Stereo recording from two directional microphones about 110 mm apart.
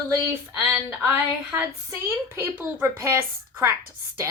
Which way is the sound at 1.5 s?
20° right (ahead or behind).